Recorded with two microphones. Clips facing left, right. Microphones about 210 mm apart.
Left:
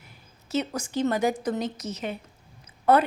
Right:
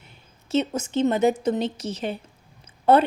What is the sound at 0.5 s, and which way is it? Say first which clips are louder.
A woman's voice: right 4 dB; 25° right (ahead or behind).